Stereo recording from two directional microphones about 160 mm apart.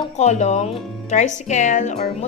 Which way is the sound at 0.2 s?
45° left (ahead or behind).